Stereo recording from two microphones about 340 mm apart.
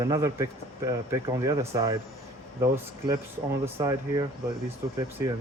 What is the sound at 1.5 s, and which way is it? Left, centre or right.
Speech, centre.